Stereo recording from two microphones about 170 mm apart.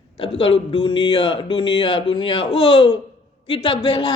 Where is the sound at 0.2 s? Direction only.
30° left (ahead or behind).